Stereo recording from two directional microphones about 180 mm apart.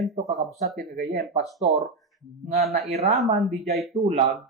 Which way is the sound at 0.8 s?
60° right (ahead or behind).